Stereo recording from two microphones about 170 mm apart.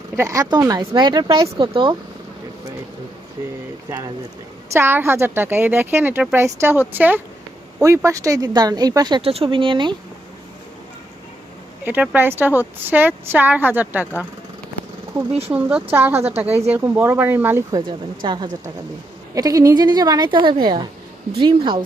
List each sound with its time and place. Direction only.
0.2 s speech: 20° right (ahead or behind)
3.8 s a woman's voice: 20° right (ahead or behind)
11.9 s a woman's voice: 10° right (ahead or behind)
15.3 s speech: 35° right (ahead or behind)
15.5 s a woman's voice: 10° right (ahead or behind); by 21.8 s 30° right (ahead or behind)